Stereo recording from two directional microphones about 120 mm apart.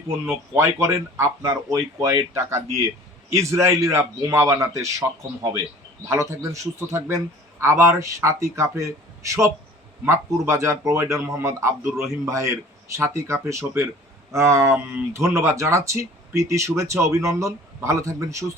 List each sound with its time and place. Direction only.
0.3 s speech: 20° right (ahead or behind)
10.1 s speech: 25° right (ahead or behind)